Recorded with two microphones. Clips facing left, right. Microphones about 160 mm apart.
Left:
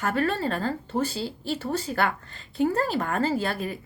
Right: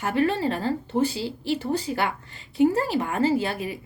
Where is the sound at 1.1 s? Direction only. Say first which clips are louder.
Right 3 dB; 15° right (ahead or behind).